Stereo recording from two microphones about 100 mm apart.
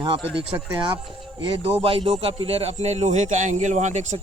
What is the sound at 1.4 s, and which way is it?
Speech, 70° right (ahead or behind).